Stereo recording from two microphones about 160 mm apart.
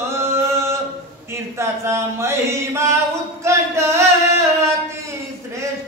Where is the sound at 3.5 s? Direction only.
15° right (ahead or behind).